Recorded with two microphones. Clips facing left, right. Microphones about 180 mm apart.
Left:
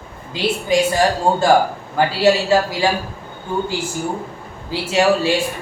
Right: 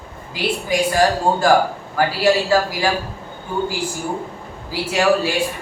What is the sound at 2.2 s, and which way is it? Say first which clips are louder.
Speech: left 2 dB; 25° left (ahead or behind).